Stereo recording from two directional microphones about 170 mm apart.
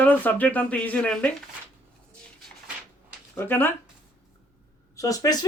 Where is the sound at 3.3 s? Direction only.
10° left (ahead or behind).